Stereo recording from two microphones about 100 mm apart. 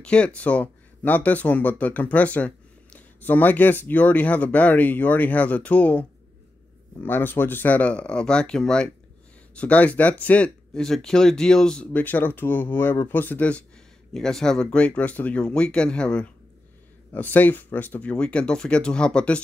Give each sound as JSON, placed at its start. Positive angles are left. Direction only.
{"t": 0.0, "sound": "speech", "side_deg": 10}